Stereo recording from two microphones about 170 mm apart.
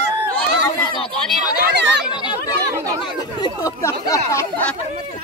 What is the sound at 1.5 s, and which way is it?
Chatter, 85° right.